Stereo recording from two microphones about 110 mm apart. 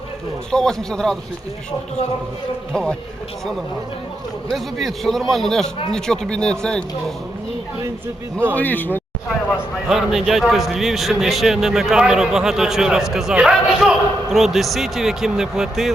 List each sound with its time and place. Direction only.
0.5 s a man's voice: 5° left (ahead or behind)
4.4 s a man's voice: centre (ahead or behind)
8.5 s speech: 15° left (ahead or behind)
9.5 s a man's voice: 5° right (ahead or behind)